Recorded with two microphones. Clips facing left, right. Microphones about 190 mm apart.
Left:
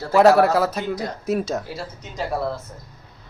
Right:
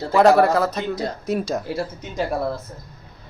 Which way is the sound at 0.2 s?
5° left (ahead or behind).